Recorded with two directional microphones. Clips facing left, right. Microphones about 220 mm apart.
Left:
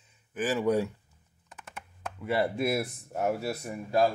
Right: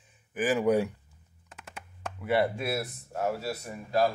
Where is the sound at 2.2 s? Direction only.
Centre (ahead or behind).